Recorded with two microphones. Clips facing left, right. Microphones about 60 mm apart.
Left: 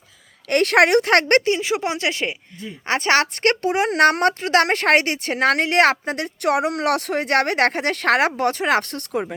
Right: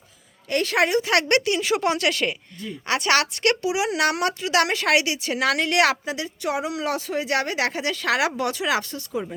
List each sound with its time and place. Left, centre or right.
0.4 s a woman's voice: left
1.5 s a woman's voice: left
2.8 s speech: left